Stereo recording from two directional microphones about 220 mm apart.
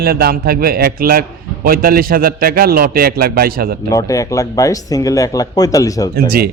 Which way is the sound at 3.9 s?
15° left (ahead or behind).